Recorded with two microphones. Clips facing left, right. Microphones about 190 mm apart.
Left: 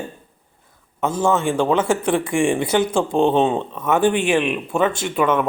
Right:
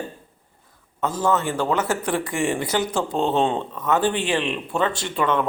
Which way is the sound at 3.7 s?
25° left (ahead or behind).